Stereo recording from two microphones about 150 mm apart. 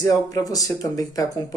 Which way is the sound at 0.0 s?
25° left (ahead or behind).